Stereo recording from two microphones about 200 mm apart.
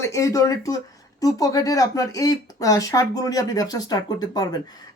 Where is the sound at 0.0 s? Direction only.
15° left (ahead or behind).